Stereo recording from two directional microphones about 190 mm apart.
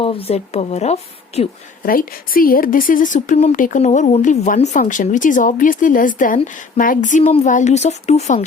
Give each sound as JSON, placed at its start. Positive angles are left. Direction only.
{"t": 0.0, "sound": "speech", "side_deg": 30}
{"t": 1.8, "sound": "speech", "side_deg": 50}